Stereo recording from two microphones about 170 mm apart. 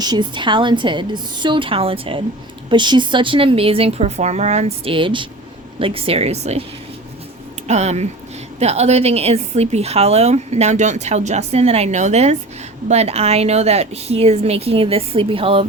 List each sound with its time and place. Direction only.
0.0 s a woman's voice: 25° right (ahead or behind)
7.7 s a woman's voice: 40° right (ahead or behind)